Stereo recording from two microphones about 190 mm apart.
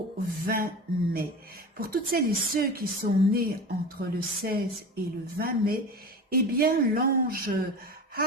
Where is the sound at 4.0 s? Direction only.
55° right (ahead or behind).